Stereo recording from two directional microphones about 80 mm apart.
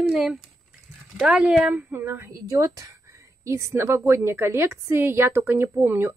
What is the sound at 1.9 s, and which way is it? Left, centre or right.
Speech, right.